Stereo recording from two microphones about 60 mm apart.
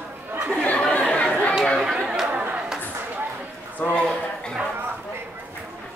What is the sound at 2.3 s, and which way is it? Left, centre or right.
Chatter, right.